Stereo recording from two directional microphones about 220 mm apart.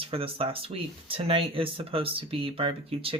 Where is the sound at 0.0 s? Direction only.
25° right (ahead or behind).